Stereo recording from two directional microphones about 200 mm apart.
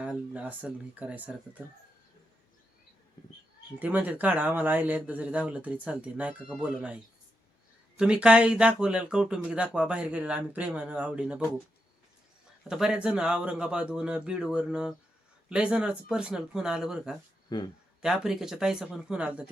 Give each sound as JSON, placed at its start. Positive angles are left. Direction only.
{"t": 0.0, "sound": "speech", "side_deg": -5}
{"t": 3.8, "sound": "speech", "side_deg": -10}
{"t": 12.6, "sound": "speech", "side_deg": -5}
{"t": 17.5, "sound": "speech", "side_deg": 20}
{"t": 18.0, "sound": "speech", "side_deg": -5}